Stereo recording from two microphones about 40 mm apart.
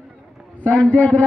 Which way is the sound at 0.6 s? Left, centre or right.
Left.